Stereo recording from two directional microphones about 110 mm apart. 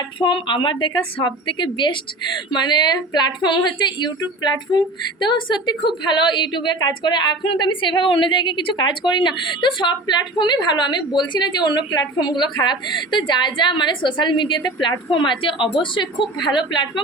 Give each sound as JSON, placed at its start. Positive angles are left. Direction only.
{"t": 0.2, "sound": "a woman's voice", "side_deg": 45}